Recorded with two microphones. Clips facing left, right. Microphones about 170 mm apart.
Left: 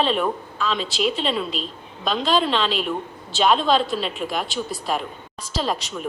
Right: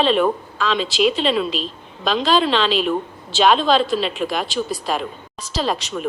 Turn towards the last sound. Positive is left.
turn(degrees=-90)